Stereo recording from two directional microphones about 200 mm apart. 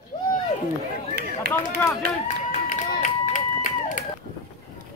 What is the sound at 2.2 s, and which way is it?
Run, 40° left (ahead or behind).